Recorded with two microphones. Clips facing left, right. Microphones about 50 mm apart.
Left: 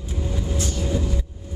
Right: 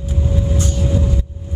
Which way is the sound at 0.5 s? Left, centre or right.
Right.